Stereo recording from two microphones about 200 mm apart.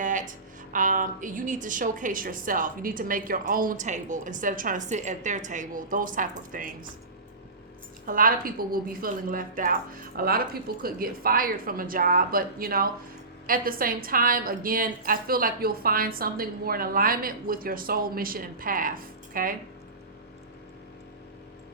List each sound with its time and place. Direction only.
0.0 s a sound: 40° right (ahead or behind)
0.7 s a woman's voice: 40° right (ahead or behind)
8.0 s a woman's voice: 45° right (ahead or behind)